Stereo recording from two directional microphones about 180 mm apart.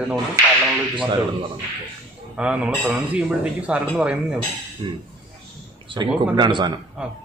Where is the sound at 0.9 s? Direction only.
25° right (ahead or behind).